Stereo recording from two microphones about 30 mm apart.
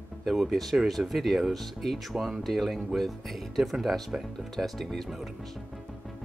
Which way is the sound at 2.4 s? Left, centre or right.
Centre.